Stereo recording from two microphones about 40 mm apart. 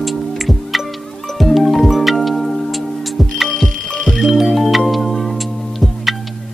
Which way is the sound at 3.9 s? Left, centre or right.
Left.